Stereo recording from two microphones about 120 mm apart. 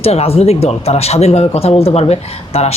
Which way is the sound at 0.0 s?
55° left (ahead or behind).